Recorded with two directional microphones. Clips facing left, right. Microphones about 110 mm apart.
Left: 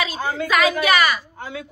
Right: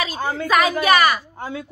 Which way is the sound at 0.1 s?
40° right (ahead or behind).